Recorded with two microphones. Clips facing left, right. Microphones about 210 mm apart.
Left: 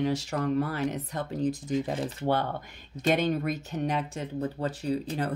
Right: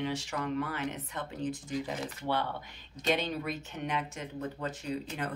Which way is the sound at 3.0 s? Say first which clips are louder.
Left 6 dB; 50° left (ahead or behind).